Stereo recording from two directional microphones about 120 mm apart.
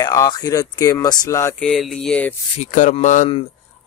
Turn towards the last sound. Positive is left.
turn(degrees=90)